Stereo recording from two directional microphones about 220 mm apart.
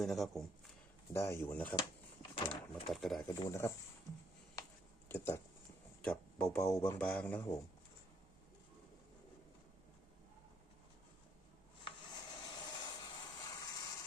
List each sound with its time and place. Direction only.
0.0 s speech: centre (ahead or behind)
1.1 s speech: 10° left (ahead or behind)
2.3 s speech: 25° left (ahead or behind)
2.9 s speech: centre (ahead or behind)
3.3 s speech: 15° left (ahead or behind)
5.0 s speech: 10° left (ahead or behind)
11.9 s a sound: 20° left (ahead or behind)